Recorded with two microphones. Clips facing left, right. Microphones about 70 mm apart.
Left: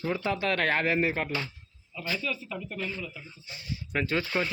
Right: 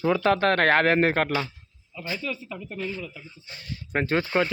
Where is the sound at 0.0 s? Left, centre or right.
Right.